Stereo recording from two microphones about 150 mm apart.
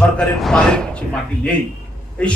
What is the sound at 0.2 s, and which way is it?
A man's voice, 5° left (ahead or behind).